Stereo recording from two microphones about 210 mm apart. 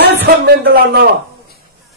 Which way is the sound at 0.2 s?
50° right (ahead or behind).